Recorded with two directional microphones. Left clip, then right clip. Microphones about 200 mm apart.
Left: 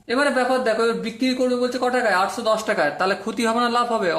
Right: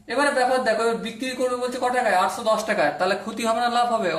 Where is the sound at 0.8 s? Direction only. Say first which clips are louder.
Left 2 dB; 45° left (ahead or behind).